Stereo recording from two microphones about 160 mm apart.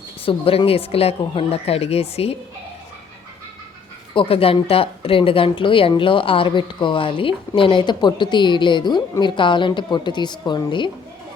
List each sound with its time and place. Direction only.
0.3 s speech: 35° left (ahead or behind)
4.1 s speech: 35° left (ahead or behind)